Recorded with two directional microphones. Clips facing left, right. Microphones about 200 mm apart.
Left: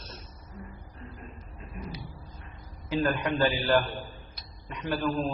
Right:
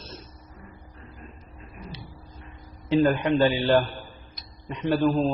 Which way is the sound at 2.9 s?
25° right (ahead or behind).